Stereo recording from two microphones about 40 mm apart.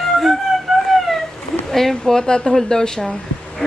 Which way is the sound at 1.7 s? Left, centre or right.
Centre.